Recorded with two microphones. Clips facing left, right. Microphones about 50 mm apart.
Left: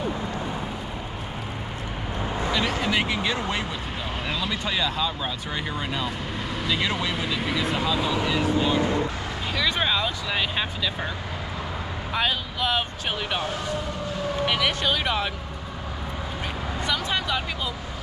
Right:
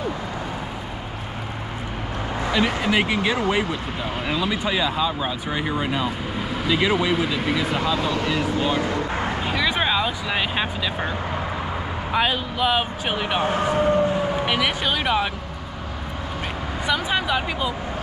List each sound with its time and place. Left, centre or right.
2.5 s speech: centre
9.1 s bow-wow: right
9.4 s speech: centre
13.4 s speech: right; by 15.3 s centre
16.8 s speech: centre